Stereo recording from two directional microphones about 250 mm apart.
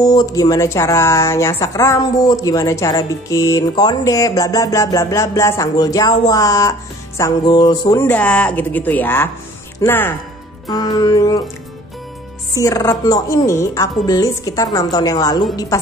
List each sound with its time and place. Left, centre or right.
0.0 s speech: centre
12.5 s speech: centre